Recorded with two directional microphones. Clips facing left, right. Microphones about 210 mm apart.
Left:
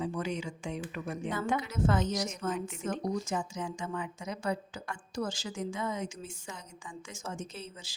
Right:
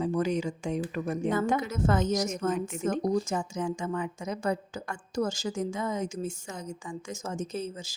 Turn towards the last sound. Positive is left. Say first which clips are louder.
# right 10 dB
turn(degrees=-45)  # may be behind; listen again after turning